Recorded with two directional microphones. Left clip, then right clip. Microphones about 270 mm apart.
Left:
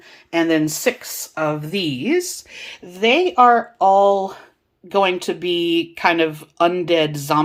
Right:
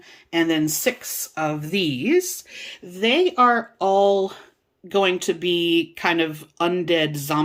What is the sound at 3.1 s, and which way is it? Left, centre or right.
Speech, centre.